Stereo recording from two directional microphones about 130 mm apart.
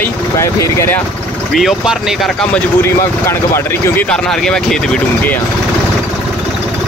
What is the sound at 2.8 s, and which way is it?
Speech, 20° left (ahead or behind).